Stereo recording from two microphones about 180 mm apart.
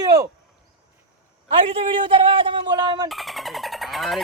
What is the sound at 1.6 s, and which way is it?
A man's voice, 30° right (ahead or behind).